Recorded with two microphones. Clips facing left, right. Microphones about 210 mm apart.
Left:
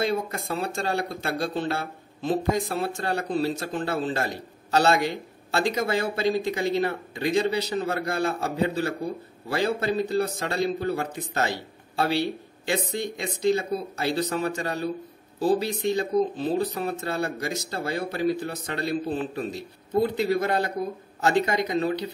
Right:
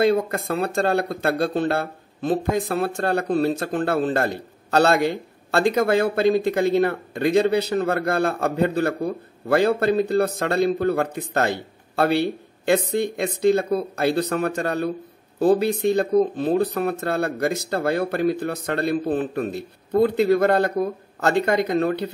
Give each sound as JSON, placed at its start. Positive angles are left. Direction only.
{"t": 0.0, "sound": "speech", "side_deg": -60}